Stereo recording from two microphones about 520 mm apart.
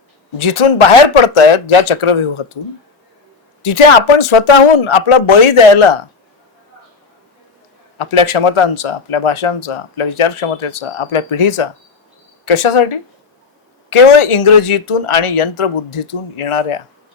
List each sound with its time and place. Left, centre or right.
0.3 s speech: left
3.6 s speech: left
7.9 s speech: left